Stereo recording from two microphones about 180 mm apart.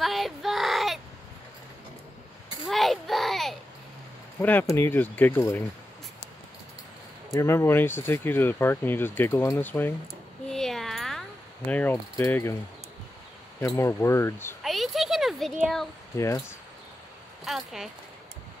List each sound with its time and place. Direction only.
0.0 s child singing: centre (ahead or behind)
2.6 s a sound: centre (ahead or behind)
4.4 s speech: 10° left (ahead or behind)
7.3 s speech: 15° left (ahead or behind)
10.5 s mechanisms: centre (ahead or behind)
13.6 s speech: 15° left (ahead or behind)
14.6 s a sound: centre (ahead or behind)
15.5 s speech: centre (ahead or behind)
16.2 s speech: 15° left (ahead or behind)
17.5 s speech: centre (ahead or behind)